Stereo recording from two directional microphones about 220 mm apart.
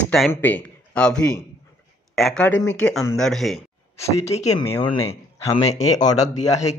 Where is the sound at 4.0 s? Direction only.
30° left (ahead or behind).